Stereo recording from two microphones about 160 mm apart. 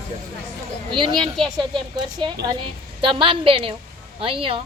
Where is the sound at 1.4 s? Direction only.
Centre (ahead or behind).